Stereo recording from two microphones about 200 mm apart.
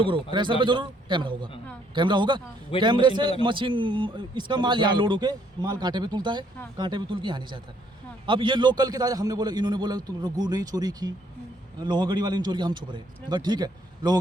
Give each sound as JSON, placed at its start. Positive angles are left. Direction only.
{"t": 0.0, "sound": "speech", "side_deg": -25}